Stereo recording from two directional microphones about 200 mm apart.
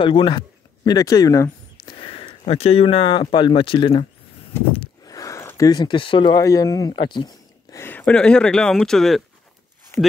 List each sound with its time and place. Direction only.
0.0 s speech: 25° left (ahead or behind)
7.7 s speech: 10° left (ahead or behind)
9.9 s speech: 10° left (ahead or behind)